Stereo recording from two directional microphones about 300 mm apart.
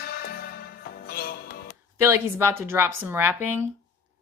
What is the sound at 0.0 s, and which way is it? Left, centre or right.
Music, left.